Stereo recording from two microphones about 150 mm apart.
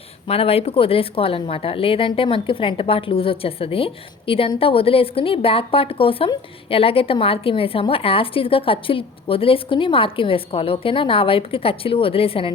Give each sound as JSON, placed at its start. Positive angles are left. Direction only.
{"t": 0.3, "sound": "a woman's voice", "side_deg": 40}